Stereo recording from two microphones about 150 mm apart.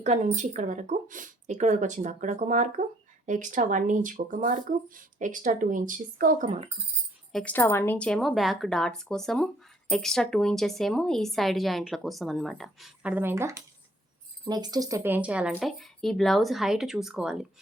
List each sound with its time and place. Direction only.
0.0 s speech: 55° right (ahead or behind)
7.3 s a woman's voice: 10° left (ahead or behind)